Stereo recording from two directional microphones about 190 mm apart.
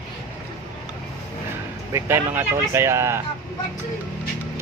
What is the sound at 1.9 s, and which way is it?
Speech, 15° right (ahead or behind).